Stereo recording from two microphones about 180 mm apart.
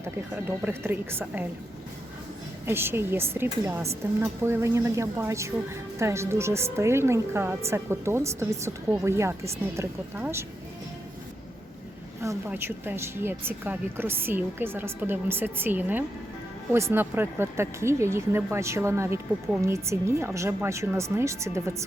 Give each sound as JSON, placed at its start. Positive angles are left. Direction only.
{"t": 0.0, "sound": "a woman's voice", "side_deg": -10}
{"t": 2.6, "sound": "a woman's voice", "side_deg": -10}
{"t": 12.2, "sound": "a woman's voice", "side_deg": -15}